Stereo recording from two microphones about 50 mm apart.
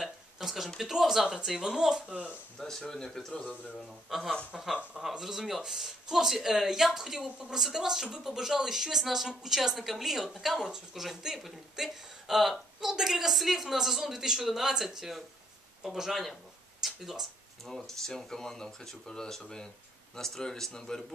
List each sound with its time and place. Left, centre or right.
0.0 s a sound: centre
0.7 s speech: centre
2.8 s a woman's voice: centre
4.9 s speech: centre
7.2 s a woman's voice: centre
7.5 s a woman's voice: centre
17.6 s speech: centre